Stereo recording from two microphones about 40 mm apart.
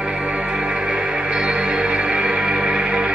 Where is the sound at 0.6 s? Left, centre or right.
Right.